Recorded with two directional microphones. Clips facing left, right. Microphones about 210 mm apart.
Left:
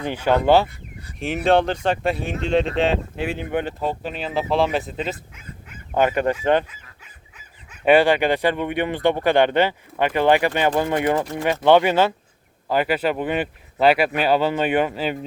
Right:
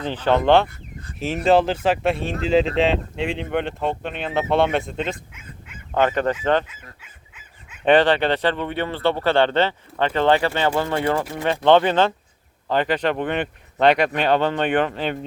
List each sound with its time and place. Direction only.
0.0 s speech: 10° left (ahead or behind)
7.9 s speech: 10° left (ahead or behind)